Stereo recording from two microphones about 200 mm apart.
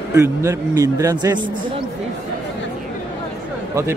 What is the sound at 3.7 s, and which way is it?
Speech, 15° right (ahead or behind).